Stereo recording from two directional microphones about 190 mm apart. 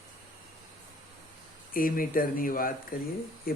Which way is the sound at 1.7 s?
50° left (ahead or behind).